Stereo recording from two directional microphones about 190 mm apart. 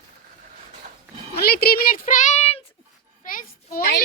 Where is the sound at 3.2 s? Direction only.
45° left (ahead or behind).